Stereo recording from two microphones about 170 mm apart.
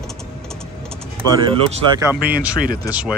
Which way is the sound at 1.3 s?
25° right (ahead or behind).